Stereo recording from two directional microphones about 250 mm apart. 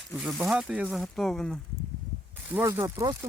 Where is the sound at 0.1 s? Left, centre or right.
Centre.